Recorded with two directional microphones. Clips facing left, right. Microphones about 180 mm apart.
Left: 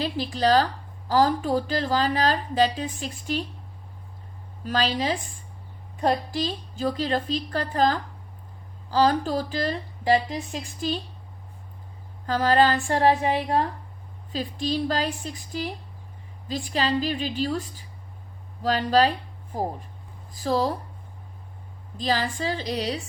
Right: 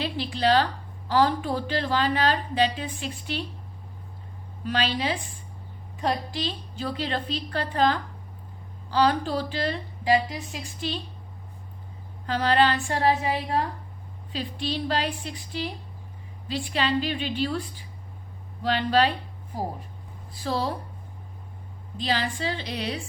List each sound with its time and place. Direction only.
0.0 s a woman's voice: 40° left (ahead or behind)
4.6 s a woman's voice: 40° left (ahead or behind)
12.2 s a woman's voice: 45° left (ahead or behind)
20.3 s a woman's voice: 40° left (ahead or behind)
21.9 s a woman's voice: 45° left (ahead or behind)